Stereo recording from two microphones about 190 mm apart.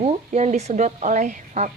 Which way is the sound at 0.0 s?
35° right (ahead or behind).